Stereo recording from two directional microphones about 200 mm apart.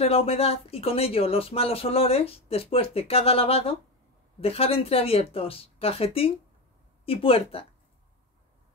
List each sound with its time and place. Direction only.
0.0 s speech: 30° left (ahead or behind)